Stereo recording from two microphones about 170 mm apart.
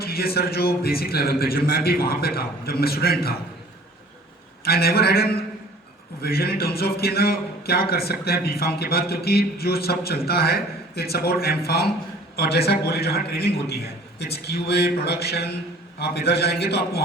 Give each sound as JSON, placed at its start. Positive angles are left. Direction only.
{"t": 0.0, "sound": "a man's voice", "side_deg": 65}
{"t": 4.6, "sound": "a man's voice", "side_deg": 65}